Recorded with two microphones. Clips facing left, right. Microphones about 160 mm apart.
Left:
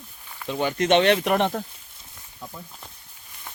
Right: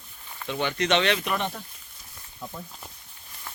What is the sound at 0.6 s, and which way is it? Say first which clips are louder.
Speech: left 5 dB; 50° left (ahead or behind).